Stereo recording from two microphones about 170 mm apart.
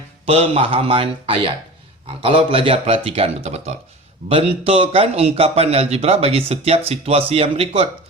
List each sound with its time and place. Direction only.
0.3 s a man's voice: 35° right (ahead or behind)